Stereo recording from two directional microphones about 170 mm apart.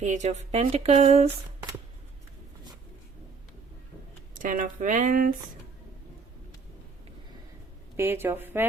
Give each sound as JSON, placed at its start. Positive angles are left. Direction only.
{"t": 0.0, "sound": "speech", "side_deg": -45}
{"t": 4.4, "sound": "speech", "side_deg": -50}
{"t": 7.9, "sound": "speech", "side_deg": -15}